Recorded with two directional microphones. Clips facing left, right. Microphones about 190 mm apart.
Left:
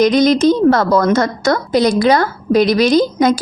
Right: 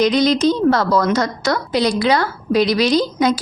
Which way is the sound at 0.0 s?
45° left (ahead or behind).